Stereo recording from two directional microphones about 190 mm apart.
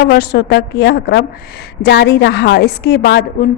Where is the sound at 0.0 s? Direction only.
60° left (ahead or behind).